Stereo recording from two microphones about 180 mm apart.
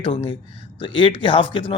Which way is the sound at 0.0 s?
25° left (ahead or behind).